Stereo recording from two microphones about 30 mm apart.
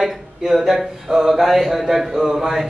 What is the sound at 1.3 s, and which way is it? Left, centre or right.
A man's voice, centre.